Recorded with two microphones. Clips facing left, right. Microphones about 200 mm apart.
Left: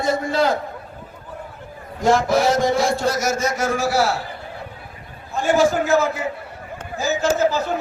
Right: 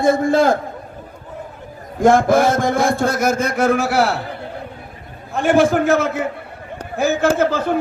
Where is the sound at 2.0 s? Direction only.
55° right (ahead or behind).